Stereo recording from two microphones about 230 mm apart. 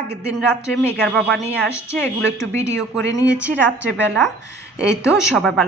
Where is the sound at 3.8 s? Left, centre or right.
Right.